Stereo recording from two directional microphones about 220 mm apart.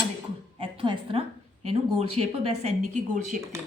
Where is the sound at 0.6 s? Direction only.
25° right (ahead or behind).